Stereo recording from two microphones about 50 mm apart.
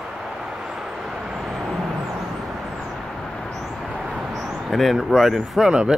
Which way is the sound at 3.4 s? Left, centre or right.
Centre.